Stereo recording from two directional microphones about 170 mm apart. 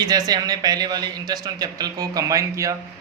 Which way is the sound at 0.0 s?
25° right (ahead or behind).